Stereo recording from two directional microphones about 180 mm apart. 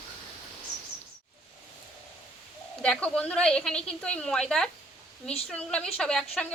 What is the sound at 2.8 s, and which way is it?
A woman's voice, 5° left (ahead or behind).